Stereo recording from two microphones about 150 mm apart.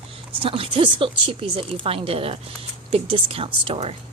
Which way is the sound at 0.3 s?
35° right (ahead or behind).